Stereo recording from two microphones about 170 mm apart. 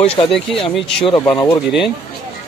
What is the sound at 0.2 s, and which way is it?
Speech, 25° left (ahead or behind).